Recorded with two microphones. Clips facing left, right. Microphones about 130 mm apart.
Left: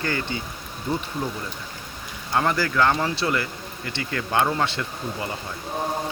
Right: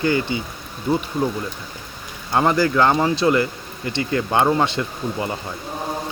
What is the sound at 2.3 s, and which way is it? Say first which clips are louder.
Speech: right 5 dB; 20° right (ahead or behind).